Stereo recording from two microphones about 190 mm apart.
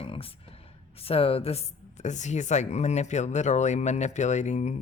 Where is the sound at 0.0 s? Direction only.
30° left (ahead or behind).